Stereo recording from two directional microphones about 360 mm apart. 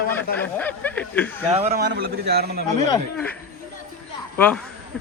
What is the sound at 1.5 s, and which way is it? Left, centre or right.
A man's voice, right.